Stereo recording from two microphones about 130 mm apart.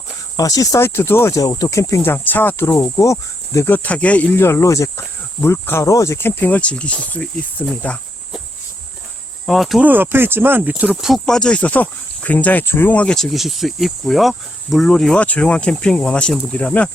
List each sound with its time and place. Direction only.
0.3 s speech: 25° left (ahead or behind); by 8.0 s 10° left (ahead or behind)
9.5 s speech: centre (ahead or behind)
9.8 s speech: 15° right (ahead or behind); by 16.9 s 10° left (ahead or behind)